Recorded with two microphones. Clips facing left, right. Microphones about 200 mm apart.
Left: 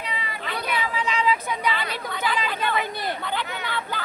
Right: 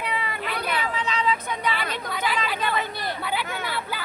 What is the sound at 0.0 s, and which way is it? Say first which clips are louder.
Vehicle: right 4 dB; 55° right (ahead or behind).